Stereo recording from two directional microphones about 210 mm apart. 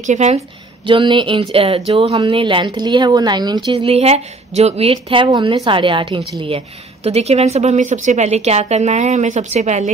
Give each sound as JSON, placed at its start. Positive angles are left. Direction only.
{"t": 0.0, "sound": "a woman's voice", "side_deg": -35}
{"t": 0.8, "sound": "speech", "side_deg": -25}